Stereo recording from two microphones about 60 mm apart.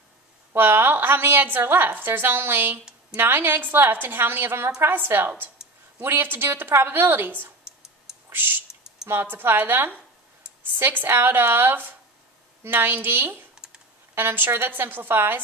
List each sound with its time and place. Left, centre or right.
0.6 s a woman's voice: right